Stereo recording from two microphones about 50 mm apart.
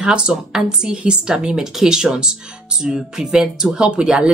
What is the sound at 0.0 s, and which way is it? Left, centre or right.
Speech, centre.